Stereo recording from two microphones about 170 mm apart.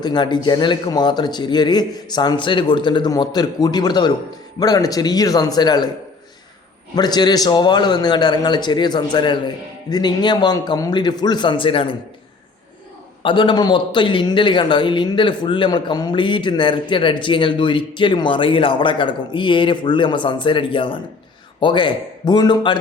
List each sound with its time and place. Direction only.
0.0 s a man's voice: 25° left (ahead or behind)
6.9 s a man's voice: 25° left (ahead or behind)
13.2 s a man's voice: 30° left (ahead or behind)